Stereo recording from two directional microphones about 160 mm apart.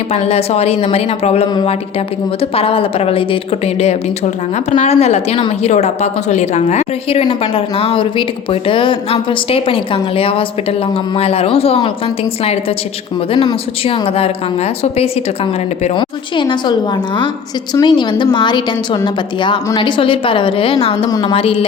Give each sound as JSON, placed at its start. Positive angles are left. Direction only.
{"t": 0.1, "sound": "a woman's voice", "side_deg": 40}
{"t": 4.8, "sound": "a woman's voice", "side_deg": 40}
{"t": 13.3, "sound": "a woman's voice", "side_deg": 30}
{"t": 16.0, "sound": "a woman's voice", "side_deg": 30}
{"t": 17.7, "sound": "a woman's voice", "side_deg": 30}
{"t": 21.1, "sound": "a woman's voice", "side_deg": 20}
{"t": 21.3, "sound": "a woman's voice", "side_deg": 35}